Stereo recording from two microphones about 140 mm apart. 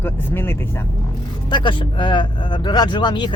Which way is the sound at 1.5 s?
35° left (ahead or behind).